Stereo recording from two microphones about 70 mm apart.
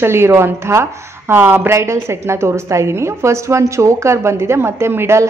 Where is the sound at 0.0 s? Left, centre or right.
Right.